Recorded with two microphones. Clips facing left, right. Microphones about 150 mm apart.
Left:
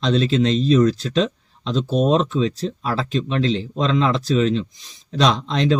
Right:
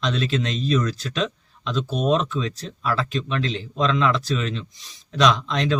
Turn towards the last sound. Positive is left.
turn(degrees=35)  # may be behind; listen again after turning